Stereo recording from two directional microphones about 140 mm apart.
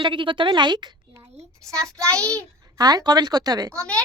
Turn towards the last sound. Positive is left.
turn(degrees=-25)  # may be behind; listen again after turning